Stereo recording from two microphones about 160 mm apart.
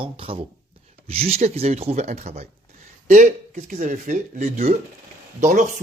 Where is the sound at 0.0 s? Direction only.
35° right (ahead or behind).